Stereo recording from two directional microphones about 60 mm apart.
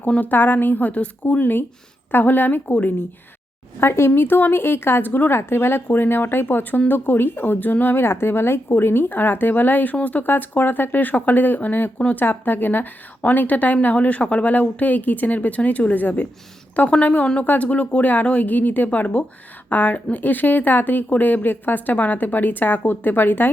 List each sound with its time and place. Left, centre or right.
0.2 s speech: left
2.6 s speech: left
3.8 s speech: left